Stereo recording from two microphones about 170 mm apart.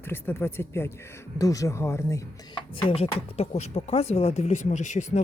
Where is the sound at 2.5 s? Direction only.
30° left (ahead or behind).